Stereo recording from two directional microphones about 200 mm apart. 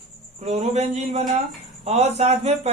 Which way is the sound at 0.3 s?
35° right (ahead or behind).